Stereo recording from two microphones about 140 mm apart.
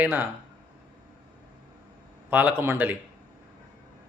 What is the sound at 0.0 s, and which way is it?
Speech, 15° right (ahead or behind).